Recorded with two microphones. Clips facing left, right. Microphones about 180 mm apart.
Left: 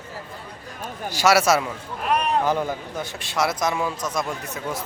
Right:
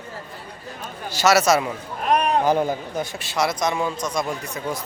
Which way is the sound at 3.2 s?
Centre (ahead or behind).